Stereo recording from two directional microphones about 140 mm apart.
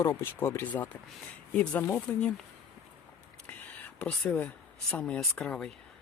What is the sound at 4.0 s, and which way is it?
Speech, 10° left (ahead or behind).